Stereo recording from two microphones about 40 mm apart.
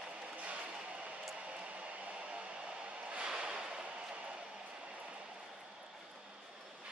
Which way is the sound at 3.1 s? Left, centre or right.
Right.